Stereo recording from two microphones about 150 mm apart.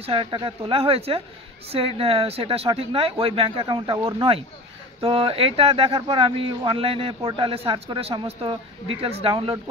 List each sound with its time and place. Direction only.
0.0 s speech: 35° right (ahead or behind)
5.0 s speech: 40° right (ahead or behind)